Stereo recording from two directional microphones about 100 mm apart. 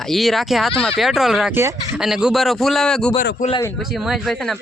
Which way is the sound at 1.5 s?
25° right (ahead or behind).